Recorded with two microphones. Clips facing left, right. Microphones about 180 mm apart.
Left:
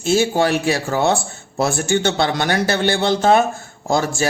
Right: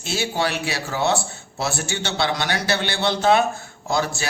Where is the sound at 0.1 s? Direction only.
45° left (ahead or behind).